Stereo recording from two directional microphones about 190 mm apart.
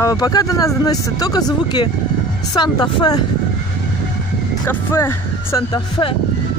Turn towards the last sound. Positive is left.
turn(degrees=20)  # may be behind; listen again after turning